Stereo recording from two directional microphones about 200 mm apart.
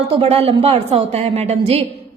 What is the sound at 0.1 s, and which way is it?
A woman's voice, 30° right (ahead or behind).